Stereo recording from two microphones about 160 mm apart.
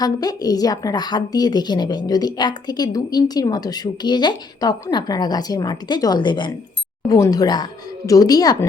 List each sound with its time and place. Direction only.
0.0 s a woman's voice: 25° left (ahead or behind)